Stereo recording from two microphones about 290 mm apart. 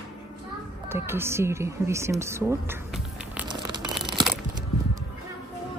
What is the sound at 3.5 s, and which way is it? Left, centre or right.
Crumpling, centre.